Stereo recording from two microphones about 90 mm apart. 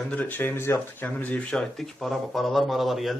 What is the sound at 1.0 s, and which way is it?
Speech, 20° left (ahead or behind).